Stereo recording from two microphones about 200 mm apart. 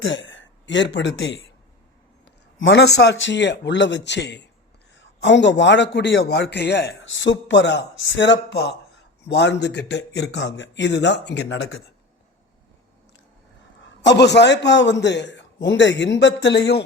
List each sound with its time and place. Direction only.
0.0 s speech: 70° left (ahead or behind)
2.6 s a man's voice: 60° left (ahead or behind)
13.8 s a man's voice: 60° left (ahead or behind)